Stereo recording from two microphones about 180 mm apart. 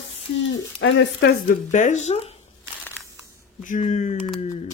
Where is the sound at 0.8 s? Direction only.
85° left; by 2.3 s 35° left (ahead or behind).